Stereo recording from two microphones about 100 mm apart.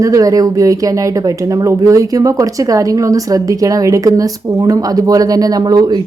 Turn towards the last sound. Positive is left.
turn(degrees=-45)  # may be behind; listen again after turning